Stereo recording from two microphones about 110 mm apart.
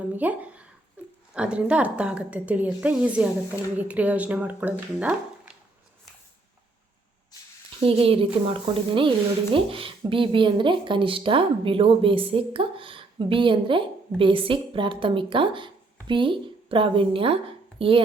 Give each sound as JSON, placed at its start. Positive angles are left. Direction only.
{"t": 0.0, "sound": "speech", "side_deg": -15}
{"t": 7.9, "sound": "a woman's voice", "side_deg": -60}